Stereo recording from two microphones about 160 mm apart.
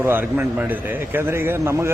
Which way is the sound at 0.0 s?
10° right (ahead or behind).